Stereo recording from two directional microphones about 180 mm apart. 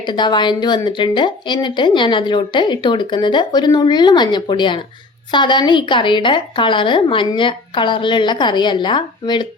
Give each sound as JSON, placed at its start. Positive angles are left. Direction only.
{"t": 0.0, "sound": "speech", "side_deg": 25}